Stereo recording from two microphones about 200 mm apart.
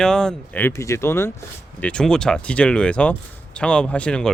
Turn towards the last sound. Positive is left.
turn(degrees=5)  # may be behind; listen again after turning